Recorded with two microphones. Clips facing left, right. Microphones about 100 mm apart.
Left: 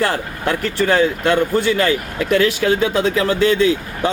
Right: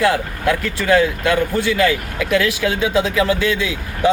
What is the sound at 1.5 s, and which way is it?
A man's voice, 40° left (ahead or behind).